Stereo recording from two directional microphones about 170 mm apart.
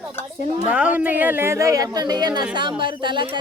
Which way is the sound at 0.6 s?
5° right (ahead or behind).